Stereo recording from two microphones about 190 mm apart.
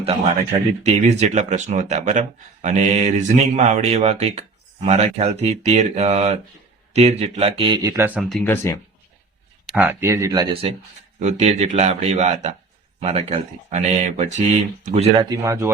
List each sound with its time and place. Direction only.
0.0 s speech: 30° right (ahead or behind); by 8.7 s 10° left (ahead or behind)
9.6 s speech: 10° right (ahead or behind)